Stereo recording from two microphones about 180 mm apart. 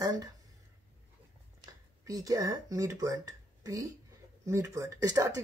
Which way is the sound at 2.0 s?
20° right (ahead or behind).